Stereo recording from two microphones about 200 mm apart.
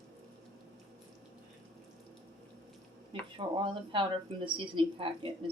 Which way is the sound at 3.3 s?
25° right (ahead or behind).